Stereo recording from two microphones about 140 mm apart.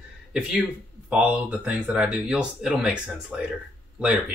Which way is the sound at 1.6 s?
10° right (ahead or behind).